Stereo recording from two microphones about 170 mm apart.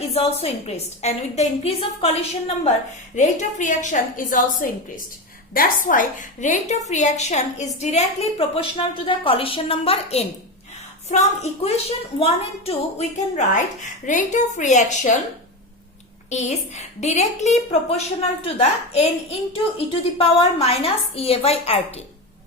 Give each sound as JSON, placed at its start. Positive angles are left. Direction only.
{"t": 0.0, "sound": "a woman's voice", "side_deg": 35}
{"t": 3.2, "sound": "a woman's voice", "side_deg": 45}
{"t": 16.3, "sound": "a woman's voice", "side_deg": 40}